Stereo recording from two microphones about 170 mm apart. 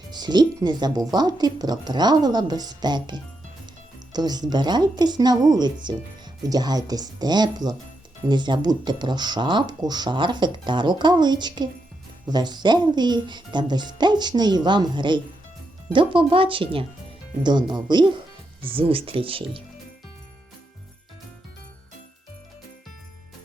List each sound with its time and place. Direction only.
0.1 s speech: 25° right (ahead or behind)